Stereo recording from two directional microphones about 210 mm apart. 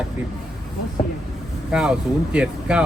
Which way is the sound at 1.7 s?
5° right (ahead or behind).